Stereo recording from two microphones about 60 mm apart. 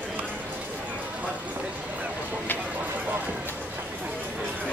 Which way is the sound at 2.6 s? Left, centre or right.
Right.